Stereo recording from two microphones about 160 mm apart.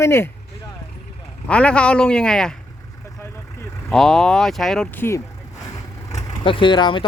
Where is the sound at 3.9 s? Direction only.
Centre (ahead or behind).